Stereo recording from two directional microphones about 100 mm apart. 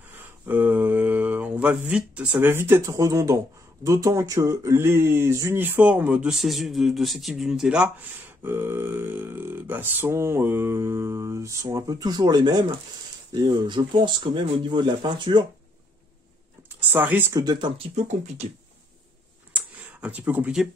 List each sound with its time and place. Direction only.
0.5 s a sound: 15° right (ahead or behind)
2.4 s a man's voice: 25° right (ahead or behind); by 7.9 s 10° right (ahead or behind)
8.5 s speech: 25° right (ahead or behind); by 15.4 s 50° right (ahead or behind)
16.9 s speech: 20° right (ahead or behind)
17.3 s speech: 40° right (ahead or behind)
17.7 s speech: 90° right
19.5 s a sound: 15° right (ahead or behind)